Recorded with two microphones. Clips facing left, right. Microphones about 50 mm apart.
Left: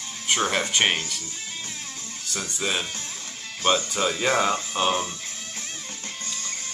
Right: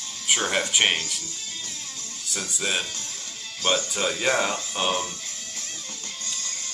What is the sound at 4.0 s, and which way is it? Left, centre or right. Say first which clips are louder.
Speech: left 1 dB; centre.